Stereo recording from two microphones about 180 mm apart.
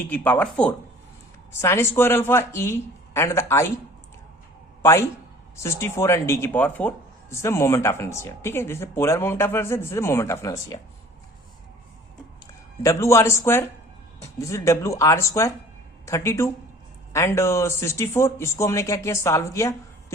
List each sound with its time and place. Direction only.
0.1 s speech: 10° left (ahead or behind)
4.8 s a man's voice: 15° left (ahead or behind)
12.8 s speech: 15° left (ahead or behind)